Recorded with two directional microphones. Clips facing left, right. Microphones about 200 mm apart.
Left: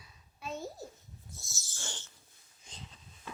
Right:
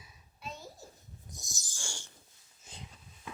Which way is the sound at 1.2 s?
15° right (ahead or behind).